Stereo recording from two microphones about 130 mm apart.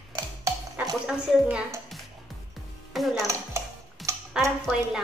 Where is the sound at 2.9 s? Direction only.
Centre (ahead or behind).